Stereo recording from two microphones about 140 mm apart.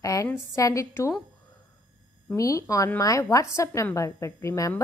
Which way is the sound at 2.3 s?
25° left (ahead or behind).